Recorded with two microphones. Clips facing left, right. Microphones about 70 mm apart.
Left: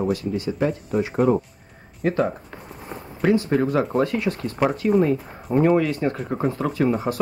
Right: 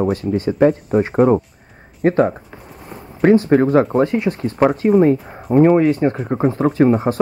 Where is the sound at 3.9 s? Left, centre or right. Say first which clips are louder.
Right 5 dB; right.